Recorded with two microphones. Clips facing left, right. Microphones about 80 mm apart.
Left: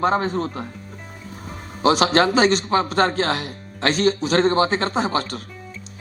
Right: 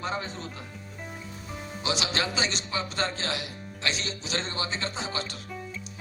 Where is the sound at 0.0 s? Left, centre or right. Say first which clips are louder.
Left 13 dB; left.